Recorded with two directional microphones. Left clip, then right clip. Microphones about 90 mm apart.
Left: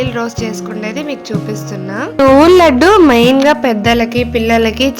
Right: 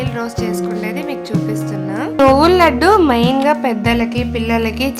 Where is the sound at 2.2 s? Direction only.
45° left (ahead or behind).